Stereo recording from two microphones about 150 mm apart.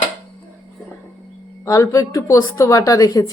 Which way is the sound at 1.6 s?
20° left (ahead or behind).